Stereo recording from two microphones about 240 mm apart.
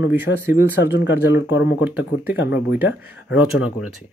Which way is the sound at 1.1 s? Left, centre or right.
Left.